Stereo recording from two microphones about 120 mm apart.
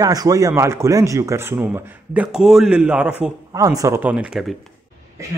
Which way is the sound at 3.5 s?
25° right (ahead or behind).